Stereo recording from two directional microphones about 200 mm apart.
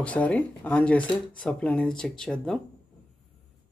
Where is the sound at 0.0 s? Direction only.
5° left (ahead or behind).